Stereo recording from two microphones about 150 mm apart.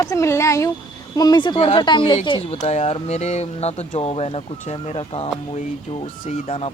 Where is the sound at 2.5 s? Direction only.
50° left (ahead or behind).